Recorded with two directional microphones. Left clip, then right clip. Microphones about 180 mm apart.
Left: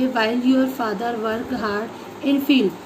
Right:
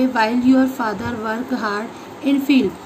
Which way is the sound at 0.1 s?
15° right (ahead or behind).